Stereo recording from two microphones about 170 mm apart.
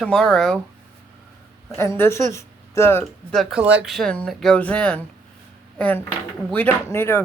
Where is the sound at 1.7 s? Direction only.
15° left (ahead or behind).